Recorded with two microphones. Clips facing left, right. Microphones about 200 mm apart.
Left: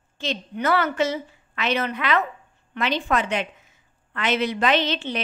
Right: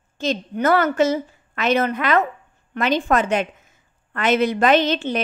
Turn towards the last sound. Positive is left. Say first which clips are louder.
# right 5 dB
turn(degrees=-45)  # may be behind; listen again after turning